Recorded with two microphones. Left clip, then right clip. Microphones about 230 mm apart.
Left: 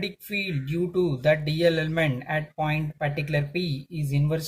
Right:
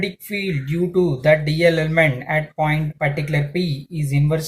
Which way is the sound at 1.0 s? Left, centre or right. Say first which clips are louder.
Right 7 dB; left.